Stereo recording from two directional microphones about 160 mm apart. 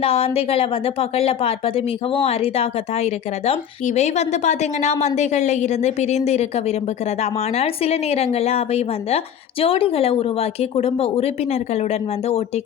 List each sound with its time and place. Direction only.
0.0 s speech: 40° left (ahead or behind)